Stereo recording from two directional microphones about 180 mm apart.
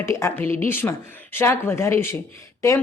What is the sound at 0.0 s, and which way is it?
A woman's voice, 15° left (ahead or behind).